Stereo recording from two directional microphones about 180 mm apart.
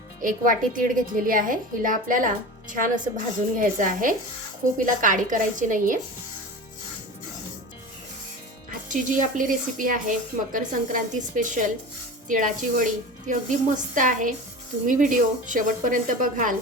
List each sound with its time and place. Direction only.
0.2 s a woman's voice: 50° right (ahead or behind)
8.9 s a woman's voice: 45° right (ahead or behind)